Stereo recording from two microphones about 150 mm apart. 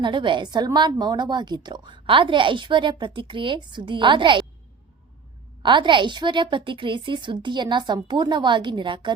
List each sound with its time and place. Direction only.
0.0 s a woman's voice: 30° right (ahead or behind)
5.6 s a woman's voice: 30° right (ahead or behind)